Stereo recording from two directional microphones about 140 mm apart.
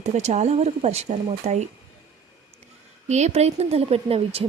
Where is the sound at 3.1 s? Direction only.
50° right (ahead or behind).